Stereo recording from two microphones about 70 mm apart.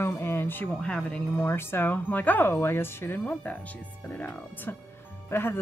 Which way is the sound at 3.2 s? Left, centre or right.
Left.